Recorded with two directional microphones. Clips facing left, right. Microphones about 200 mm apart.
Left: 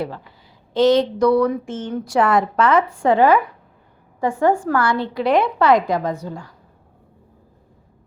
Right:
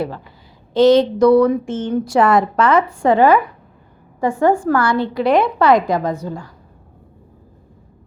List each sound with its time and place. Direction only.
0.7 s a woman's voice: 35° right (ahead or behind)